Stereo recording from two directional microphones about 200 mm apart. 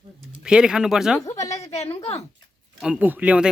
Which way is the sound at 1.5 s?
30° left (ahead or behind).